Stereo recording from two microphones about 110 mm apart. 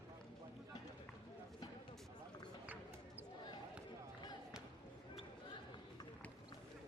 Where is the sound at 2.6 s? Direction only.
15° right (ahead or behind).